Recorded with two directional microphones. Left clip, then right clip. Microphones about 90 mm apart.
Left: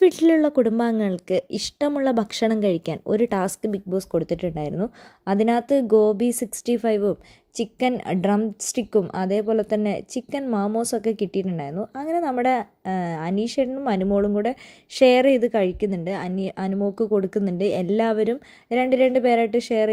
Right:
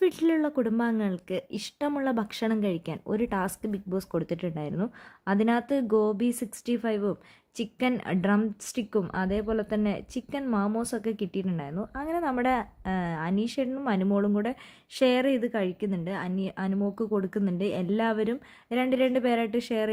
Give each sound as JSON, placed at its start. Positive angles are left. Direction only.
{"t": 0.0, "sound": "a woman's voice", "side_deg": 40}
{"t": 3.8, "sound": "a woman's voice", "side_deg": 20}
{"t": 15.0, "sound": "a woman's voice", "side_deg": 40}